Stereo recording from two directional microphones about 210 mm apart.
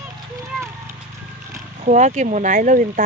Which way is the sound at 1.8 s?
35° right (ahead or behind).